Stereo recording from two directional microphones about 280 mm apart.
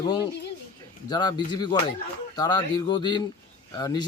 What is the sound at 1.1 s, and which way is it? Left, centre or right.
Speech, centre.